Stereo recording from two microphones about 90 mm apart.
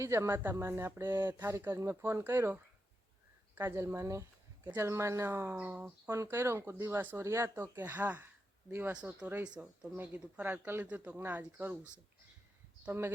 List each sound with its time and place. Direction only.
0.0 s speech: 30° right (ahead or behind)
5.5 s speech: 15° right (ahead or behind)
6.2 s speech: 30° right (ahead or behind)
7.6 s speech: 20° right (ahead or behind)
8.9 s speech: 10° right (ahead or behind)
12.9 s speech: 25° right (ahead or behind)